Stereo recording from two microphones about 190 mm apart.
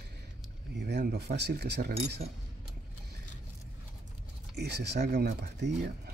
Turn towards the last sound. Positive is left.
turn(degrees=-55)  # may be behind; listen again after turning